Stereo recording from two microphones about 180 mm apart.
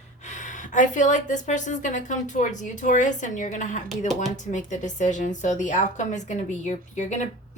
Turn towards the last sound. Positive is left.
turn(degrees=40)  # may be behind; listen again after turning